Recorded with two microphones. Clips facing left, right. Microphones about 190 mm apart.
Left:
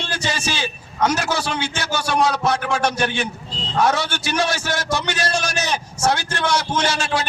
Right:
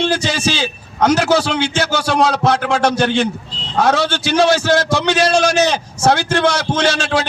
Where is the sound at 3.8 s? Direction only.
80° right.